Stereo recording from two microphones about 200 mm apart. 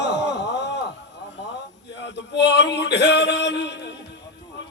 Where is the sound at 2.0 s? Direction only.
60° left (ahead or behind).